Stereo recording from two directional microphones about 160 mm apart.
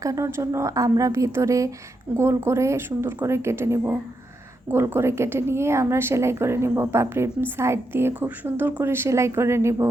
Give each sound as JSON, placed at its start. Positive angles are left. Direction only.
{"t": 0.0, "sound": "a woman's voice", "side_deg": -20}